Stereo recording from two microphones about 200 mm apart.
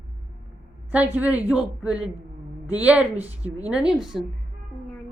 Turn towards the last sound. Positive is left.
turn(degrees=0)  # may be behind; listen again after turning